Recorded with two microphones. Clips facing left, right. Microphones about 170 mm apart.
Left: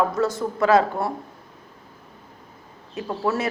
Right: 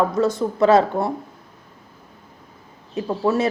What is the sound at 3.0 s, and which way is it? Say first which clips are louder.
Speech: right 4 dB; 15° right (ahead or behind).